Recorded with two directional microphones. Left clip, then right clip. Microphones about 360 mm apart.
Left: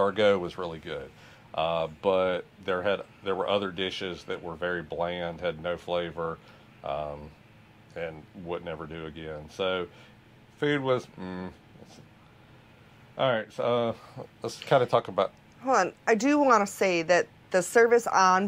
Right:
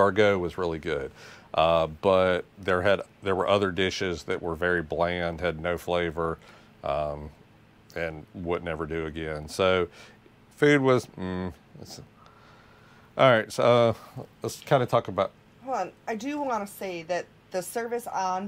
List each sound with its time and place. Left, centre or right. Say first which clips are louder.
0.0 s speech: right 2 dB; right
0.6 s speech: right 6 dB; right
13.1 s speech: right 7 dB; right
14.1 s speech: right 1 dB; right
15.6 s a woman's voice: left 6 dB; left